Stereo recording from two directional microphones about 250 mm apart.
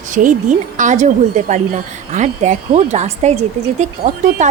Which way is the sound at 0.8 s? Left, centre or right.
Right.